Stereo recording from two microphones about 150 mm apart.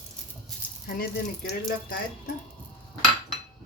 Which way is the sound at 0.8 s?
80° left.